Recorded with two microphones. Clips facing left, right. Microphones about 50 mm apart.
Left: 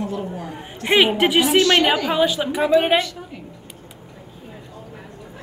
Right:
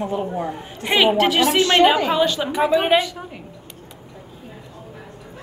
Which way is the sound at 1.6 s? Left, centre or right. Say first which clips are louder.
Right 1 dB; right.